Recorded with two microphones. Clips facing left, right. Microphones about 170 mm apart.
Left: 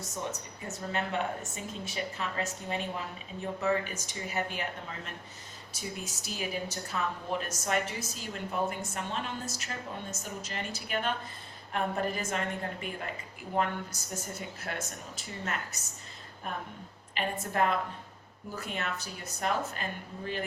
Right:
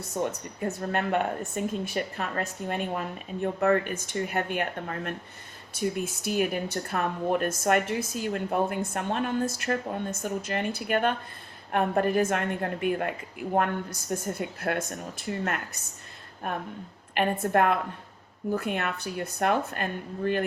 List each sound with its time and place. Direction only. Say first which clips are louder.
0.0 s speech: right 7 dB; 60° right (ahead or behind)